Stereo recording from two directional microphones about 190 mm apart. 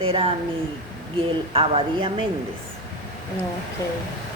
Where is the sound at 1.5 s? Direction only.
30° right (ahead or behind).